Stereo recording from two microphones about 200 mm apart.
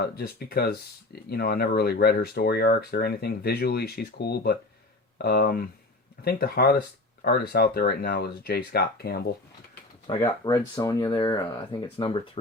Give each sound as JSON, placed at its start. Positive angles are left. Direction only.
{"t": 0.0, "sound": "speech", "side_deg": 50}
{"t": 10.2, "sound": "speech", "side_deg": 20}